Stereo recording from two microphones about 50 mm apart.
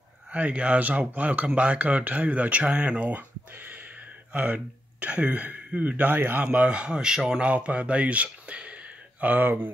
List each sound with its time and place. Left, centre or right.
0.3 s a man's voice: right
4.3 s a man's voice: right